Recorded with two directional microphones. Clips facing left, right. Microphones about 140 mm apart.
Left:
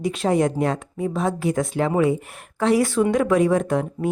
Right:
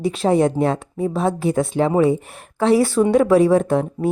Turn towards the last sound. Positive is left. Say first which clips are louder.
# right 3 dB
turn(degrees=-30)  # may be behind; listen again after turning